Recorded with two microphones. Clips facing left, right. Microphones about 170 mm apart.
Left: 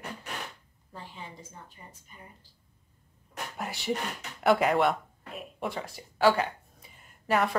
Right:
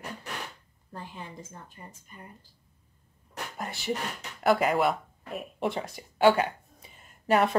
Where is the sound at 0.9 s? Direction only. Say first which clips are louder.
Right 3 dB; 50° right (ahead or behind).